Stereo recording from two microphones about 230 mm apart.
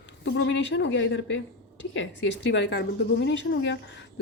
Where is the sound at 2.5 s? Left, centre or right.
Left.